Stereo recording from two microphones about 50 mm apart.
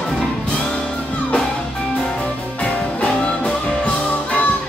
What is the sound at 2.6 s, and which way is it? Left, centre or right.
Music, left.